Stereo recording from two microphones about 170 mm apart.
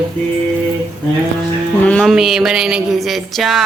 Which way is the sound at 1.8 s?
5° left (ahead or behind).